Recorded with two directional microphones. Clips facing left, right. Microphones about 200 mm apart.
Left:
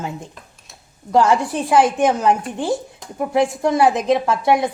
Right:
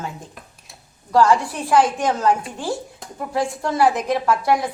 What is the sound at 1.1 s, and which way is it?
A woman's voice, 20° left (ahead or behind).